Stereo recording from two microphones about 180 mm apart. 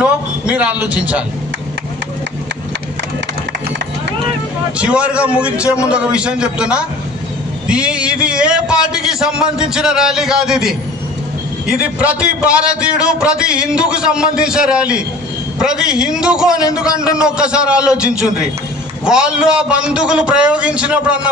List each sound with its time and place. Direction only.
0.0 s speech: 5° right (ahead or behind)
4.7 s a man's voice: 5° right (ahead or behind)
11.8 s a man's voice: 5° right (ahead or behind)
19.0 s a man's voice: 5° right (ahead or behind)